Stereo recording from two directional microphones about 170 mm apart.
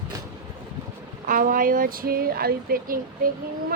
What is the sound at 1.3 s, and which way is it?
Speech, 55° right (ahead or behind).